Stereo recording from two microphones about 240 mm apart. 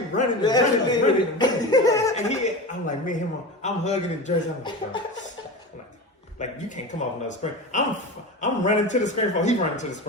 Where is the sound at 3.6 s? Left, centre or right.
Left.